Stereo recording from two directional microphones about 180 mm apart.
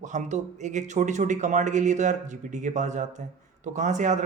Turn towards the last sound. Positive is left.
turn(degrees=-40)  # may be behind; listen again after turning